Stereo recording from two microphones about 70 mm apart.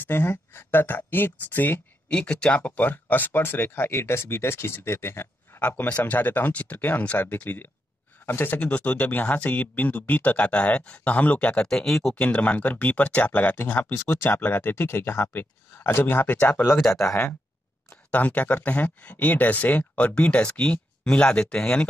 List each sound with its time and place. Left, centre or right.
0.0 s speech: left
2.0 s speech: centre; by 5.6 s left
5.6 s speech: left
8.5 s speech: centre
12.2 s speech: centre
16.8 s speech: centre
18.1 s speech: left